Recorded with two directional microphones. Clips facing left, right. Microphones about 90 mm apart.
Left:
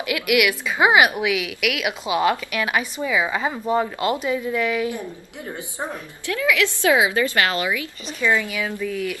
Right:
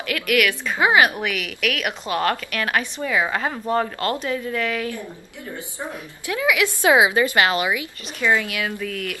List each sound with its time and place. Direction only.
0.0 s a woman's voice: 10° left (ahead or behind)
6.2 s a woman's voice: 20° right (ahead or behind)
8.9 s speech: 65° right (ahead or behind)